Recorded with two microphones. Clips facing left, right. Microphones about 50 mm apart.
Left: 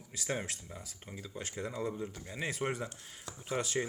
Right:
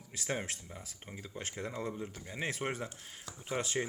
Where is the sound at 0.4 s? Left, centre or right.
Right.